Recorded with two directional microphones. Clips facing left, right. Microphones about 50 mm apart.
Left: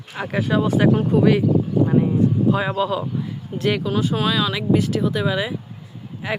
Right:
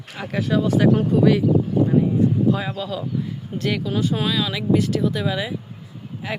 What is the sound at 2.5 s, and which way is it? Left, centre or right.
Speech, left.